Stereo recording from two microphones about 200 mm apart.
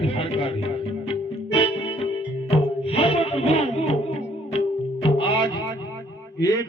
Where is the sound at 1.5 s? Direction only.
30° left (ahead or behind).